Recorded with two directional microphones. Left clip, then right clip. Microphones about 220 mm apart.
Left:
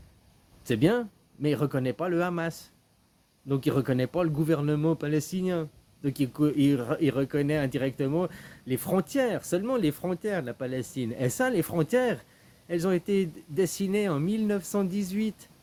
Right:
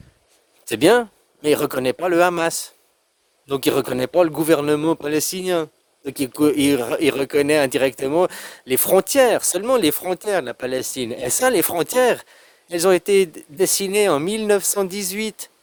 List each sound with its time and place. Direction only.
0.6 s speech: 55° right (ahead or behind)